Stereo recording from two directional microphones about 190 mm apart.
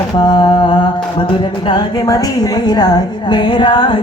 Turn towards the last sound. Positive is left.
turn(degrees=25)  # may be behind; listen again after turning